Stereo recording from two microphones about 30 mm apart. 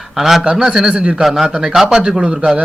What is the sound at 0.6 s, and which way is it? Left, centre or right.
Speech, right.